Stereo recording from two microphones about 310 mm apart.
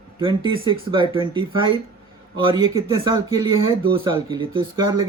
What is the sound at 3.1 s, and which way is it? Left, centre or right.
Speech, centre.